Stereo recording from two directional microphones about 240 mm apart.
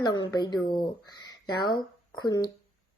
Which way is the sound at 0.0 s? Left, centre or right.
Centre.